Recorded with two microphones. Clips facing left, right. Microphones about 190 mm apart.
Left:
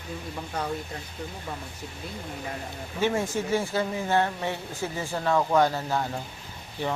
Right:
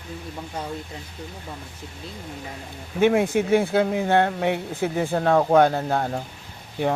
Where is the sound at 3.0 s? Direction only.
55° right (ahead or behind).